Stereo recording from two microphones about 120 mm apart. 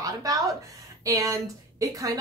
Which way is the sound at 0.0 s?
30° right (ahead or behind).